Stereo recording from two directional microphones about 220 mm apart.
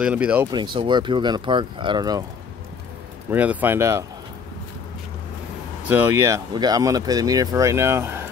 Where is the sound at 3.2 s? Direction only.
10° right (ahead or behind).